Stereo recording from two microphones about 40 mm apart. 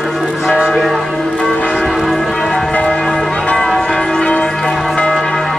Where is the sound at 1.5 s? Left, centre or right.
Left.